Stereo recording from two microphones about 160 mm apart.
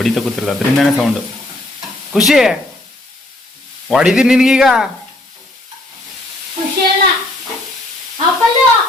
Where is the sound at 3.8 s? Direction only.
5° right (ahead or behind).